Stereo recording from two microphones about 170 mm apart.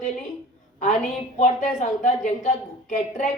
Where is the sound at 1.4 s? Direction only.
45° left (ahead or behind).